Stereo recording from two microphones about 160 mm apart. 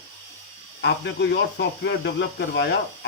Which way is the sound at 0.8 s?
90° left.